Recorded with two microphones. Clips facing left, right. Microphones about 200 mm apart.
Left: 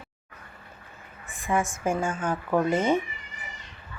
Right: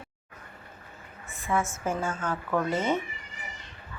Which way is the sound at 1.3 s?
15° left (ahead or behind).